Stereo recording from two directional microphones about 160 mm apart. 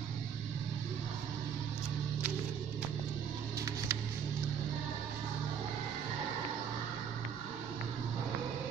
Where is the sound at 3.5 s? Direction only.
20° right (ahead or behind).